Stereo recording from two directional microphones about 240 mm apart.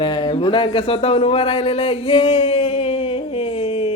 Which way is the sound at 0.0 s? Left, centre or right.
Centre.